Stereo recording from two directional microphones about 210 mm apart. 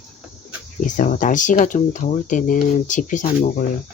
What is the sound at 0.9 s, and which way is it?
Speech, 35° left (ahead or behind).